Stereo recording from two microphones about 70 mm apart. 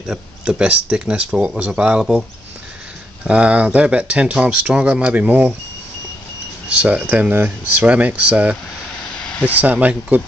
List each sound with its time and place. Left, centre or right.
0.0 s speech: centre
3.3 s speech: centre
6.7 s speech: centre
9.1 s vehicle: centre
9.6 s speech: right